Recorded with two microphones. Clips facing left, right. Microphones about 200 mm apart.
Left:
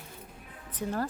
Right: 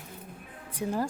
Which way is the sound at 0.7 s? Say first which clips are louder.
Right 2 dB; 10° right (ahead or behind).